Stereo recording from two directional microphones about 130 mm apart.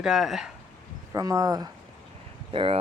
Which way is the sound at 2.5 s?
45° right (ahead or behind).